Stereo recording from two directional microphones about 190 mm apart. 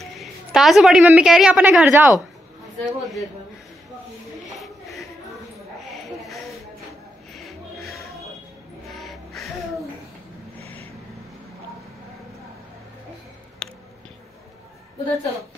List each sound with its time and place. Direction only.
0.0 s a woman's voice: centre (ahead or behind)
2.8 s a man's voice: centre (ahead or behind)
4.6 s a sound: centre (ahead or behind)
6.0 s a sound: centre (ahead or behind)
7.3 s music: centre (ahead or behind)
10.6 s vehicle: 30° right (ahead or behind)
13.6 s music: 5° left (ahead or behind)